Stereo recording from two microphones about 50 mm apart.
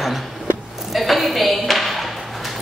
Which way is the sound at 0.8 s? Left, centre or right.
Centre.